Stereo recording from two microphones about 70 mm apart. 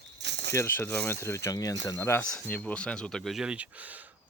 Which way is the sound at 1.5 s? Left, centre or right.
Left.